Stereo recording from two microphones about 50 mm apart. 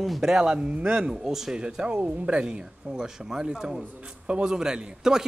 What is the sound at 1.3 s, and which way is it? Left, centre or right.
Speech, centre.